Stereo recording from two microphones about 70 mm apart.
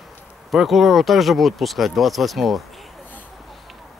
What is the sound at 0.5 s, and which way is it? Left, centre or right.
Speech, centre.